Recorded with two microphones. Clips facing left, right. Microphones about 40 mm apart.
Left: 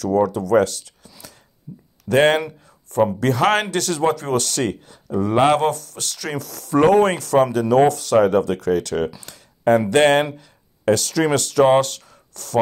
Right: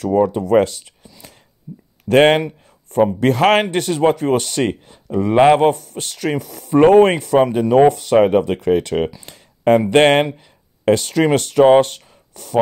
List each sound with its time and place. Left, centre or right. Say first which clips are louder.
0.0 s speech: right 2 dB; right
1.7 s speech: right 3 dB; centre
2.0 s speech: right 4 dB; right
2.6 s a sound: right 3 dB; right
3.2 s speech: right 6 dB; right
3.7 s speech: right 4 dB; right
9.2 s a sound: right 2 dB; right
9.8 s speech: right 3 dB; right